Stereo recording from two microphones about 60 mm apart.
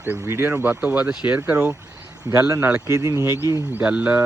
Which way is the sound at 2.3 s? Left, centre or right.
Right.